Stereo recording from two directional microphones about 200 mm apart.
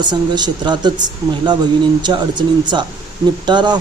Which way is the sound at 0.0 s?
20° right (ahead or behind).